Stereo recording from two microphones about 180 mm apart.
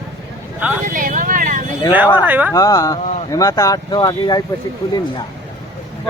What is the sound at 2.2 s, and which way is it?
Speech, 10° right (ahead or behind).